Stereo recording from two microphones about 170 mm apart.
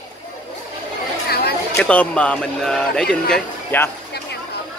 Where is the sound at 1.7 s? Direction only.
10° left (ahead or behind).